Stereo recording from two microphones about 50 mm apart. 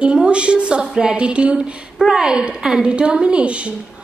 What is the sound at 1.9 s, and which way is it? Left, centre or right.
A woman's voice, centre.